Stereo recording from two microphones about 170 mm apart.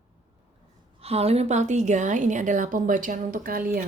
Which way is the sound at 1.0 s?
35° right (ahead or behind).